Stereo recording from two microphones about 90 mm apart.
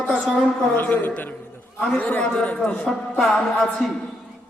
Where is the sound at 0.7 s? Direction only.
20° left (ahead or behind).